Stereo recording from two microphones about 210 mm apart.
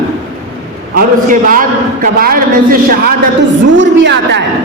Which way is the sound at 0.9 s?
40° right (ahead or behind).